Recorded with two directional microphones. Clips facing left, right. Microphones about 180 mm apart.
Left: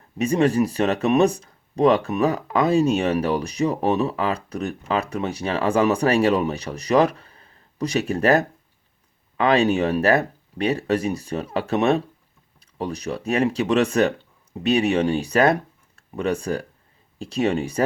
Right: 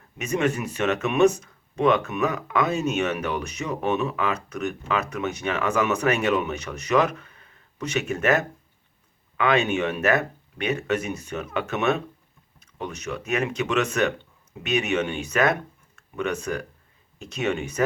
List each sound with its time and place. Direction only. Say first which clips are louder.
0.2 s speech: left 6 dB; 35° left (ahead or behind)